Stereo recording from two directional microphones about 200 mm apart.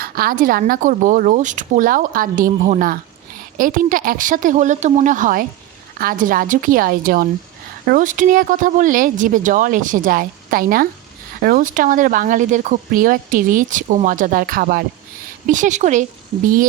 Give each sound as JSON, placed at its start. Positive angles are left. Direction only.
{"t": 0.0, "sound": "speech", "side_deg": -50}